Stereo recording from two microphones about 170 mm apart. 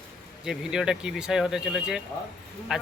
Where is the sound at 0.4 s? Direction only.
5° right (ahead or behind).